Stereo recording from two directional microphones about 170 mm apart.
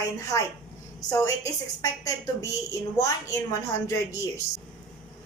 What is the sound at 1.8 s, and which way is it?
Speech, 20° left (ahead or behind).